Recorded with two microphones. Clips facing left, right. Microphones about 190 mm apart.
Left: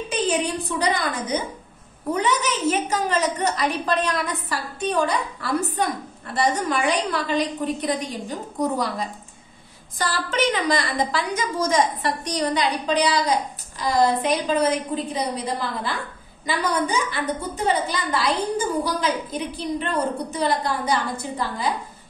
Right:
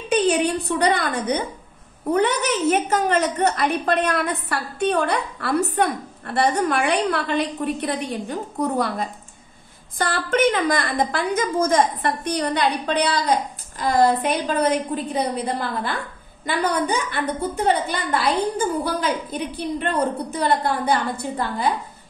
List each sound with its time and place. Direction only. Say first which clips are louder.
0.1 s a woman's voice: right 5 dB; 60° right (ahead or behind)